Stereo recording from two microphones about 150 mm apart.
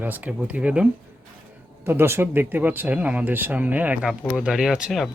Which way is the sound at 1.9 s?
15° right (ahead or behind).